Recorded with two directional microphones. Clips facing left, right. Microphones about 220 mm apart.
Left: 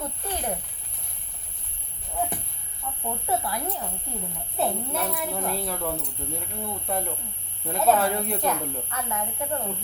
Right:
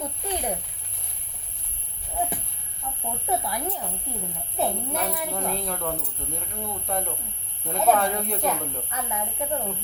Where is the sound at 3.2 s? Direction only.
15° right (ahead or behind).